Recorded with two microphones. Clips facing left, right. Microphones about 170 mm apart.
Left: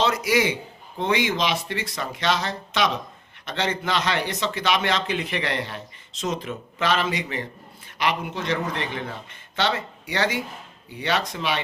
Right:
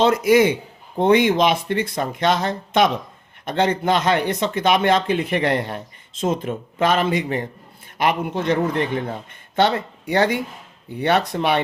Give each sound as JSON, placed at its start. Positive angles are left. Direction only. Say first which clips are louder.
{"t": 0.0, "sound": "a man's voice", "louder": "right 7 dB", "side_deg": -50}